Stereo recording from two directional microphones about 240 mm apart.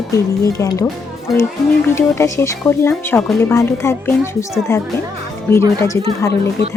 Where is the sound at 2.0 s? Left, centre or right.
Centre.